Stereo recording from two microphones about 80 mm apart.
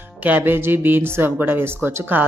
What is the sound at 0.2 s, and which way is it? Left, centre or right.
Speech, right.